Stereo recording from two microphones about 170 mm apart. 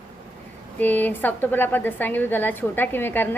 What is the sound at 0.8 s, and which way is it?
A woman's voice, 10° left (ahead or behind).